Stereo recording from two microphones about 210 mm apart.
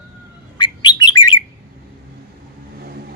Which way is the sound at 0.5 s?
20° left (ahead or behind).